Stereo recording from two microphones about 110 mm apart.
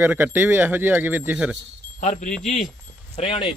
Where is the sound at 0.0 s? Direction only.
15° right (ahead or behind).